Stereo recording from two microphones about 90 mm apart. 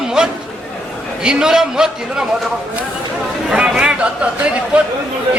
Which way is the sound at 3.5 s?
10° right (ahead or behind).